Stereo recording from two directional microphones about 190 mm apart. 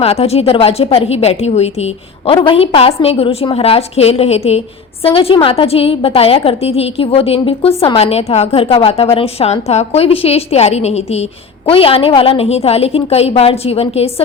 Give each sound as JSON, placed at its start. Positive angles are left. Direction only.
{"t": 0.0, "sound": "a woman's voice", "side_deg": 35}